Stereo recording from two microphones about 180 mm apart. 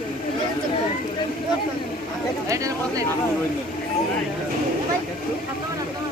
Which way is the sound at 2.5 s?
20° right (ahead or behind).